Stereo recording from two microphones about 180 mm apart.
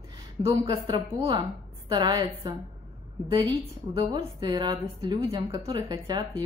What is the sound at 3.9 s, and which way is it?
Speech, 25° right (ahead or behind).